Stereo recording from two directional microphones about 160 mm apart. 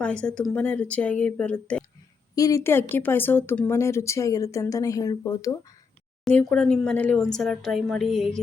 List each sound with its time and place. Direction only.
0.0 s speech: 5° left (ahead or behind)
2.3 s speech: 20° left (ahead or behind)
6.2 s a woman's voice: 5° left (ahead or behind)